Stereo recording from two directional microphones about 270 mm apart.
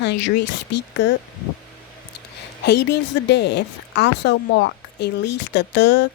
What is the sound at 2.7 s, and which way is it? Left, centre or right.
Speech, left.